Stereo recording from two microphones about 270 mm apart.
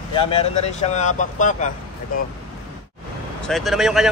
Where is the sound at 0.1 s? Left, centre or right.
Left.